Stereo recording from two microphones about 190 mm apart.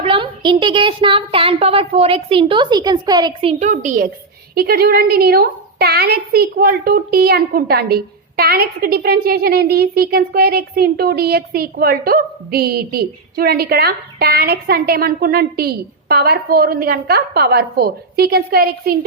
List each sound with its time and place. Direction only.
0.0 s a woman's voice: 25° right (ahead or behind)
3.5 s a woman's voice: 40° right (ahead or behind); by 18.9 s 55° right (ahead or behind)